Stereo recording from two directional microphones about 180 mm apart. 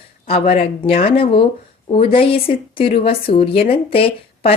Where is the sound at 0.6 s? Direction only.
35° left (ahead or behind).